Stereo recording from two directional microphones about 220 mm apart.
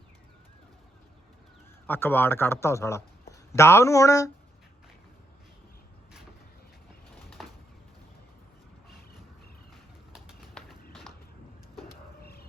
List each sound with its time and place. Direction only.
1.9 s a man's voice: 10° left (ahead or behind)
7.4 s bird: centre (ahead or behind)
10.1 s bird: 5° right (ahead or behind)
12.2 s a sound: 45° left (ahead or behind)